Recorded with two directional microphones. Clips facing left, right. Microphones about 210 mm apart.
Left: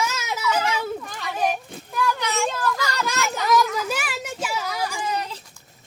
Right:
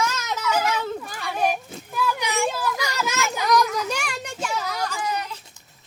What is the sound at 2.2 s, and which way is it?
Children playing, 15° right (ahead or behind).